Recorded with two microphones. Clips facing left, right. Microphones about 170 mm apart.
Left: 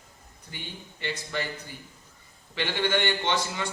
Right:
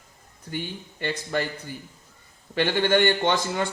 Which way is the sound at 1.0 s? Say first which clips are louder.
Right 6 dB; 50° right (ahead or behind).